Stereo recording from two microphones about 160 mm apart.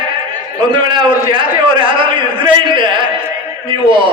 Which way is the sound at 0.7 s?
30° right (ahead or behind).